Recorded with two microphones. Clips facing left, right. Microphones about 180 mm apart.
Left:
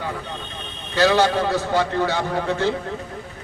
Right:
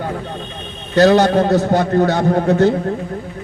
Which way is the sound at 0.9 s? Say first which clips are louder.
Right 6 dB; 45° right (ahead or behind).